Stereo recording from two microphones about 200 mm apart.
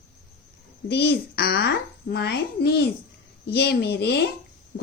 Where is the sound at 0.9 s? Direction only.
55° left (ahead or behind).